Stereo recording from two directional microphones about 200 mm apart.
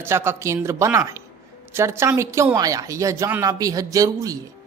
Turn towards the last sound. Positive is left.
turn(degrees=-15)  # may be behind; listen again after turning